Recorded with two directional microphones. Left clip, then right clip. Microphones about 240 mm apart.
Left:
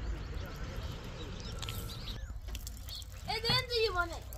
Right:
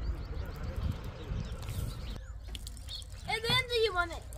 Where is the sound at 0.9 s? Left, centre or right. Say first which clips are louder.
Even; left.